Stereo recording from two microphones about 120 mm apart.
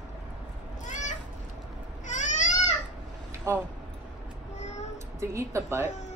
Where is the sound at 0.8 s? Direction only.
90° left.